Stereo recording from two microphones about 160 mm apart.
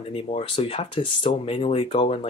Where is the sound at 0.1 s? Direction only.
40° left (ahead or behind).